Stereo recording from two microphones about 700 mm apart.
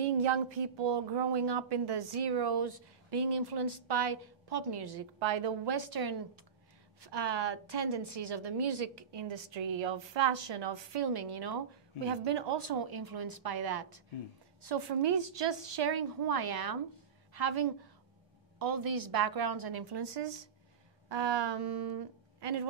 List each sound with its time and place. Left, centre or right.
0.0 s a woman's voice: right